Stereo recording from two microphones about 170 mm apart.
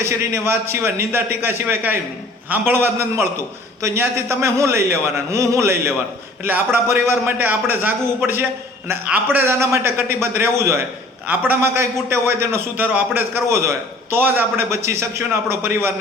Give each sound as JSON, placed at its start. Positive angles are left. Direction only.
{"t": 0.0, "sound": "a man's voice", "side_deg": -15}